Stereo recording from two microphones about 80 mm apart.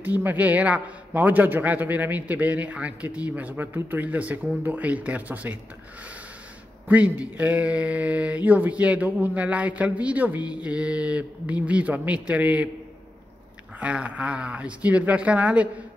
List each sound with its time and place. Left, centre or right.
0.0 s a man's voice: right
6.9 s speech: centre
13.7 s speech: centre